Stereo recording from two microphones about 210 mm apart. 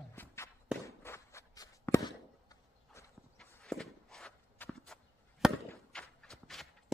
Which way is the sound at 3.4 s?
Centre (ahead or behind).